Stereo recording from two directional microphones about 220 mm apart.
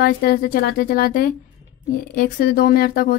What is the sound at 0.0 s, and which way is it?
Speech, 45° left (ahead or behind).